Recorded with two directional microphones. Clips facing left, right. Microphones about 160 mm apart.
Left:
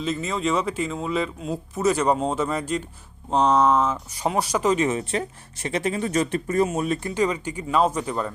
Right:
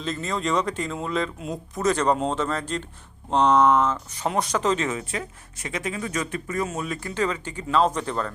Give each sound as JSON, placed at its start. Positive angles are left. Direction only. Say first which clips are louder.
{"t": 0.0, "sound": "speech", "louder": "left 2 dB", "side_deg": 5}
{"t": 4.9, "sound": "speech", "louder": "left 4 dB", "side_deg": 30}
{"t": 7.1, "sound": "speech", "louder": "left 3 dB", "side_deg": 15}